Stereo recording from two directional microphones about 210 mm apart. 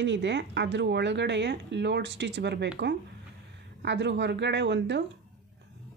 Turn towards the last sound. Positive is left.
turn(degrees=-55)  # may be behind; listen again after turning